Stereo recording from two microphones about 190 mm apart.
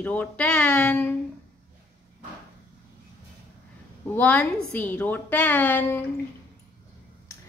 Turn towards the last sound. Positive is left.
turn(degrees=15)  # may be behind; listen again after turning